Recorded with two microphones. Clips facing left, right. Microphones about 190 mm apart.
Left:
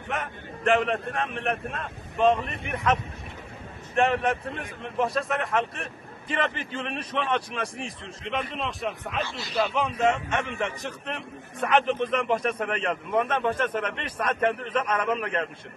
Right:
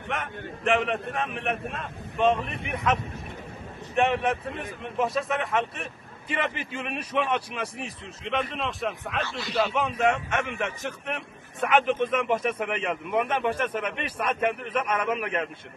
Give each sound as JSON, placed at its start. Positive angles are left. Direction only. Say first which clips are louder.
{"t": 0.1, "sound": "a man's voice", "louder": "even", "side_deg": 0}
{"t": 10.8, "sound": "a man's voice", "louder": "right 1 dB", "side_deg": 0}